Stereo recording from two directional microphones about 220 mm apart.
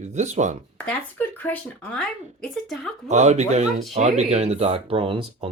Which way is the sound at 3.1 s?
30° right (ahead or behind).